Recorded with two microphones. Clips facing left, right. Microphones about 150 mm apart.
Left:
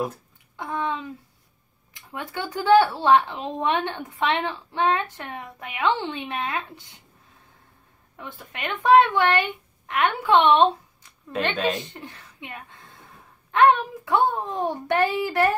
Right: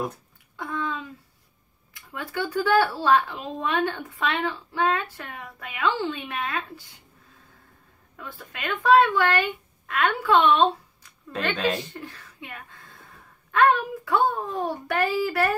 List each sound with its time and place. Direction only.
0.6 s a sound: 20° left (ahead or behind)
2.0 s speech: 20° left (ahead or behind)
8.2 s a woman's voice: 20° left (ahead or behind)